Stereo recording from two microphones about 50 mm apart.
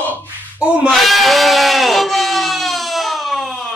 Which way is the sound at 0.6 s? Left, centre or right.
Right.